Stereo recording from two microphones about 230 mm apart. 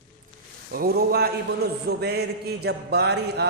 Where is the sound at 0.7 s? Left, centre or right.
Right.